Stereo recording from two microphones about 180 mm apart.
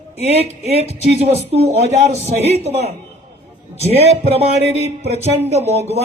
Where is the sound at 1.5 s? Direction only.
35° right (ahead or behind).